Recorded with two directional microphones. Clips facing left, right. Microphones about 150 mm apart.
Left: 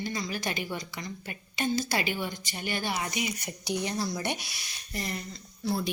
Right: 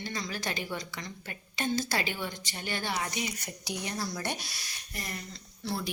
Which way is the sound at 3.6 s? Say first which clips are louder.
Left 5 dB; 25° left (ahead or behind).